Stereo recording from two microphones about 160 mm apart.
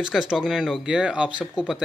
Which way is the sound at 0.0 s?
5° right (ahead or behind).